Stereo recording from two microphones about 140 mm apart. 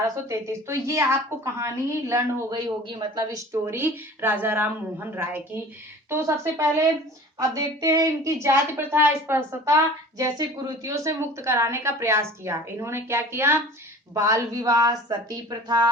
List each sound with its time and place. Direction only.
0.0 s a woman's voice: 20° right (ahead or behind)
2.8 s a woman's voice: 30° right (ahead or behind)